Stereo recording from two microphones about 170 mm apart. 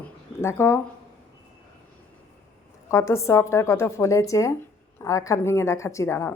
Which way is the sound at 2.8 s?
15° left (ahead or behind).